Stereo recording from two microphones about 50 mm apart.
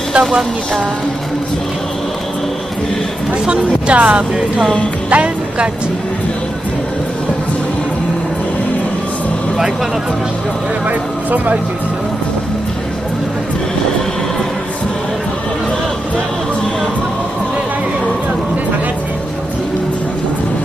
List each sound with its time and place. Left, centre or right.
0.2 s a sound: centre
3.4 s speech: right
5.1 s music: right